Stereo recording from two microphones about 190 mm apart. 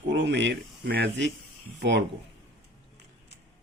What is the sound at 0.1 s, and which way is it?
Speech, 70° right (ahead or behind).